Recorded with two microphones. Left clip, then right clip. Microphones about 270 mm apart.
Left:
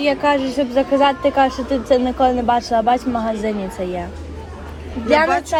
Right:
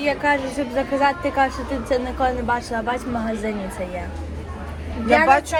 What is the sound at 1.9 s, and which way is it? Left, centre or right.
A woman's voice, left.